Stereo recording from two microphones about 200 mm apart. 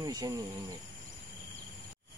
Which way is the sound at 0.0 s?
20° right (ahead or behind).